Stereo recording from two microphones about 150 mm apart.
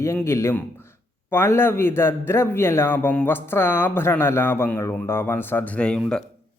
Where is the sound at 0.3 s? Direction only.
20° left (ahead or behind).